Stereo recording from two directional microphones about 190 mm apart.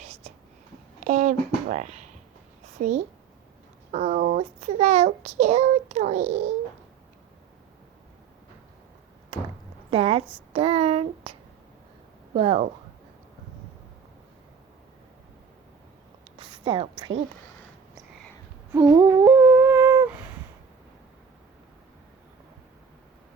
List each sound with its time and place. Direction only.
0.0 s whispering: 35° right (ahead or behind)
1.0 s speech: 40° right (ahead or behind)
3.9 s a child's voice: 35° right (ahead or behind)
9.9 s a woman's voice: 30° right (ahead or behind)
12.3 s a child's voice: 35° right (ahead or behind)
16.4 s a sound: 25° right (ahead or behind)
18.9 s humming: 15° right (ahead or behind)